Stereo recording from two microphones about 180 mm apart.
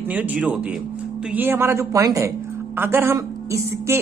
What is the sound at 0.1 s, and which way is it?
Speech, 10° right (ahead or behind).